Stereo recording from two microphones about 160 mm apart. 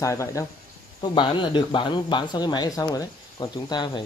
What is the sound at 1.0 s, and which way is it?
Speech, 30° left (ahead or behind).